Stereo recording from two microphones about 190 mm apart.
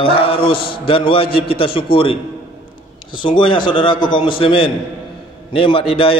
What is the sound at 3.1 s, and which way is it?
A man's voice, 25° left (ahead or behind).